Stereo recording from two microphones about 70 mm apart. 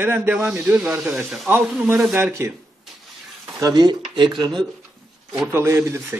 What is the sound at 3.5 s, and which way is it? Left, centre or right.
Speech, right.